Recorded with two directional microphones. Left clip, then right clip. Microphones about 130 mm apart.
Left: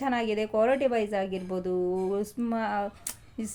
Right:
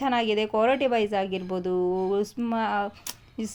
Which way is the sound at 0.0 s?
20° right (ahead or behind).